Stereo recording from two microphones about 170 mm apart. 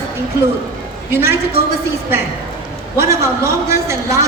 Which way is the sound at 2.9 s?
15° right (ahead or behind).